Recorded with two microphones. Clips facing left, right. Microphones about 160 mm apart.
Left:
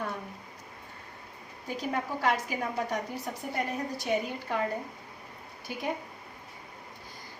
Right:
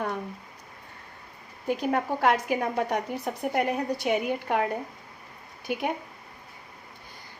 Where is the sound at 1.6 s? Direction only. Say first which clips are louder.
Right 6 dB; 55° right (ahead or behind).